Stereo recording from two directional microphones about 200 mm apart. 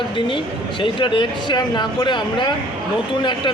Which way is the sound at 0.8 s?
25° left (ahead or behind).